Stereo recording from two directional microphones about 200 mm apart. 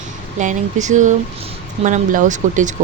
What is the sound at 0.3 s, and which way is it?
Speech, 40° right (ahead or behind).